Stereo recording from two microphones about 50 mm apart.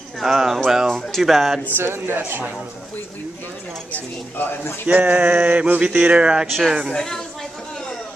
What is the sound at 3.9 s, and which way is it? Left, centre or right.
Speech, left.